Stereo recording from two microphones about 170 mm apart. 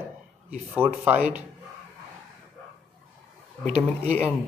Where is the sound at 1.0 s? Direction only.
10° right (ahead or behind).